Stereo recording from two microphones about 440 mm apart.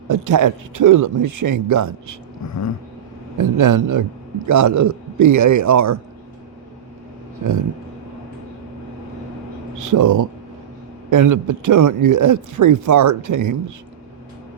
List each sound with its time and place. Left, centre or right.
0.1 s a man's voice: right
3.3 s a man's voice: right
9.7 s speech: right